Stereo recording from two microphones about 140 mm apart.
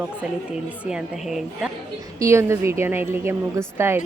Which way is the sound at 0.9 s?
5° right (ahead or behind).